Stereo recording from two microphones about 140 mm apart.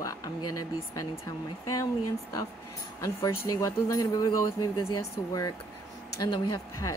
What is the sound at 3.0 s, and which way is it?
Speech, 25° left (ahead or behind).